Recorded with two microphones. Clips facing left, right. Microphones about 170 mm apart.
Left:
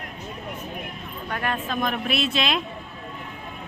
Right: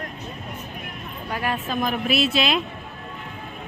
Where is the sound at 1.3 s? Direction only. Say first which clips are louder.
Right 1 dB; 5° right (ahead or behind).